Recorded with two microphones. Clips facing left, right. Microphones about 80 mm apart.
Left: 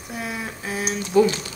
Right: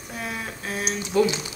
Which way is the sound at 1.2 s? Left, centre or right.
Centre.